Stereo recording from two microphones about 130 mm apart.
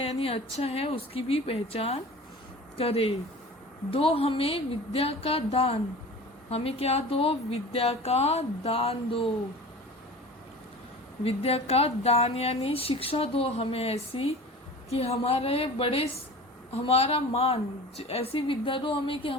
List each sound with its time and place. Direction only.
0.0 s a woman's voice: 50° left (ahead or behind)
11.2 s a woman's voice: 50° left (ahead or behind)